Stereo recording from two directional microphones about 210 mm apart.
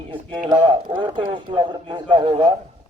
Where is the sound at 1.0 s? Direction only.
25° right (ahead or behind).